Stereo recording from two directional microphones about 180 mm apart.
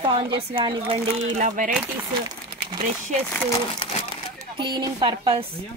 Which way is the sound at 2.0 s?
25° right (ahead or behind).